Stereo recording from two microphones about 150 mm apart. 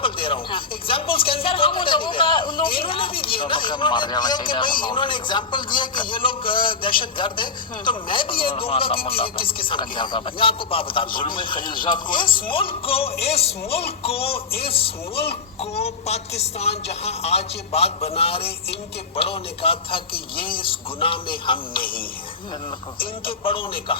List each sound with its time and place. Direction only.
0.0 s a man's voice: 35° left (ahead or behind)
23.0 s a man's voice: 35° left (ahead or behind)